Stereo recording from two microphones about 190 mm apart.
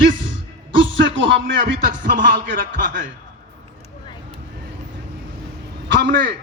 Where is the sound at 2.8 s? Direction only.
45° right (ahead or behind).